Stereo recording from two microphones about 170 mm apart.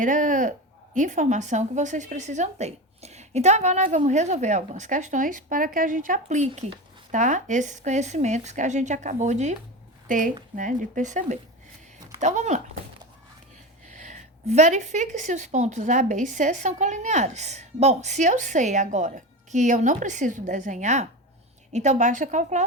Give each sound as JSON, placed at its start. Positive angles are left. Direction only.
{"t": 0.0, "sound": "a woman's voice", "side_deg": -50}
{"t": 13.8, "sound": "a woman's voice", "side_deg": -45}